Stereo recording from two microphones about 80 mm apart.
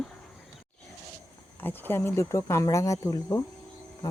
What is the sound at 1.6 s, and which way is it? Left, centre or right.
Speech, left.